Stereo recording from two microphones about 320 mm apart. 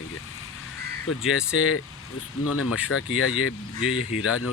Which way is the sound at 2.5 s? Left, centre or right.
Left.